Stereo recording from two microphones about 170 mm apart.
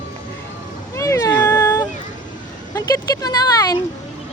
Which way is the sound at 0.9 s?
15° left (ahead or behind).